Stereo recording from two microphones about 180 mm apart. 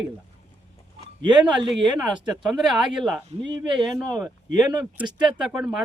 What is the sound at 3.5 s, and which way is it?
Speech, 20° right (ahead or behind).